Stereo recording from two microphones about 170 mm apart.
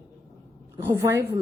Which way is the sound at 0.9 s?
15° right (ahead or behind).